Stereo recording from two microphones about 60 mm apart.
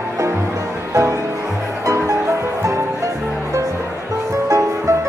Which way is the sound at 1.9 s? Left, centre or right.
Right.